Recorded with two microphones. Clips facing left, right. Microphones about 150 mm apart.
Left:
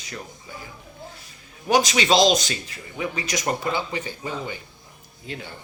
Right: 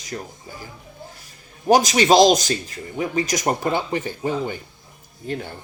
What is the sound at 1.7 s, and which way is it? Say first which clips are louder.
Speech: right 4 dB; 40° right (ahead or behind).